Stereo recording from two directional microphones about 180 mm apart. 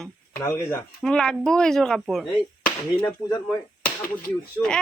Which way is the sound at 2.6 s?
10° left (ahead or behind).